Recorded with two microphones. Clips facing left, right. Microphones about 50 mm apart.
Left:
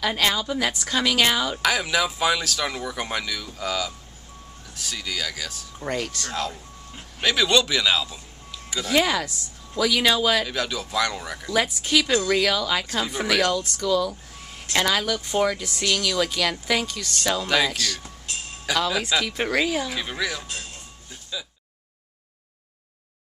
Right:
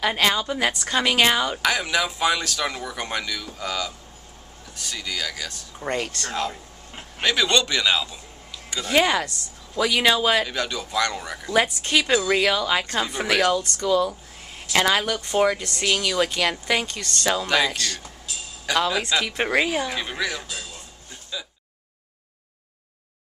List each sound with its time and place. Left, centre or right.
0.0 s speech: centre
1.7 s speech: centre
8.6 s music: centre
8.9 s speech: centre
10.4 s speech: centre
11.4 s speech: centre
12.8 s speech: centre
17.5 s speech: centre
19.2 s speech: centre
19.7 s speech: centre
21.3 s a sound: centre